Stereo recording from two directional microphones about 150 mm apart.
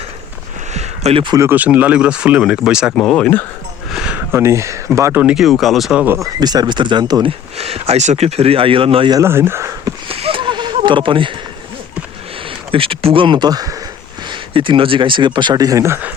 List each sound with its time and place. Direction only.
0.7 s a sound: 45° right (ahead or behind)
1.4 s speech: 15° right (ahead or behind)
2.9 s speech: 5° left (ahead or behind)
3.9 s a sound: 5° right (ahead or behind)
4.3 s speech: 15° right (ahead or behind)
5.2 s speech: 5° right (ahead or behind)
6.1 s speech: 25° right (ahead or behind)
9.1 s speech: 15° right (ahead or behind)
10.1 s a sound: 40° right (ahead or behind)
12.7 s speech: 35° right (ahead or behind); by 16.1 s 15° right (ahead or behind)